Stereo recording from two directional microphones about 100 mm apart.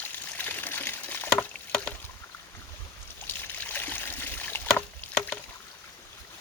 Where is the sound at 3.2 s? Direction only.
20° left (ahead or behind).